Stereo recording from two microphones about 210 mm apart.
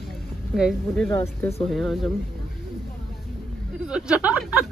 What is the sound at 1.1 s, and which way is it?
Speech, 10° left (ahead or behind).